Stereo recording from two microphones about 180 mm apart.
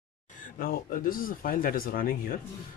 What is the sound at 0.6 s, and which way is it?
Speech, 50° left (ahead or behind).